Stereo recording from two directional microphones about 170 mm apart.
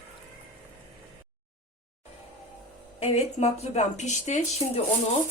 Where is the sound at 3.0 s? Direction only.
40° left (ahead or behind).